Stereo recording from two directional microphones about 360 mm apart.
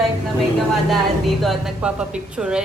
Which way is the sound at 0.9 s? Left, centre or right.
Centre.